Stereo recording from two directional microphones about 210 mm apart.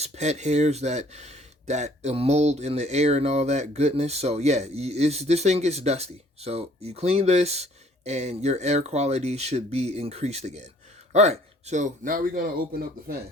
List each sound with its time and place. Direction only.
0.0 s speech: 35° right (ahead or behind)